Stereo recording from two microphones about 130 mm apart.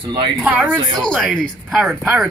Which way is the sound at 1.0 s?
5° left (ahead or behind).